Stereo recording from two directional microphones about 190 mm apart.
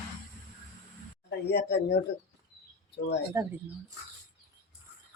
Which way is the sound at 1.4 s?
60° left (ahead or behind).